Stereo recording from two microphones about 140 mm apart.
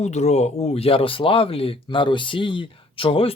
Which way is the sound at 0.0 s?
50° left (ahead or behind).